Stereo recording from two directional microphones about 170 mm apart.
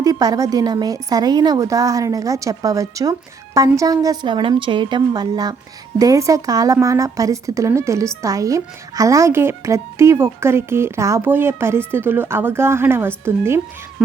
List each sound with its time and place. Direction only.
0.0 s a woman's voice: 20° right (ahead or behind)